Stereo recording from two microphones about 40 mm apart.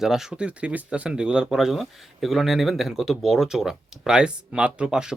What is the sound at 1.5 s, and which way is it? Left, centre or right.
Speech, centre.